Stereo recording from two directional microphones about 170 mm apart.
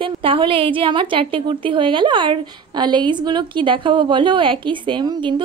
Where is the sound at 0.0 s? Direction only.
30° right (ahead or behind).